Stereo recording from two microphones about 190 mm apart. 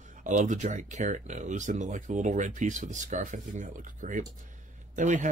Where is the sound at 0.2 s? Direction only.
40° right (ahead or behind).